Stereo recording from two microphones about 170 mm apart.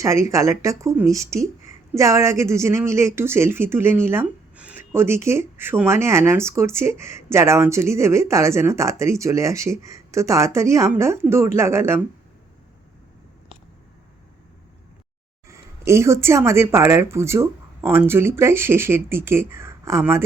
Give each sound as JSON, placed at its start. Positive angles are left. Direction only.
{"t": 0.0, "sound": "speech", "side_deg": -15}
{"t": 15.4, "sound": "speech", "side_deg": -15}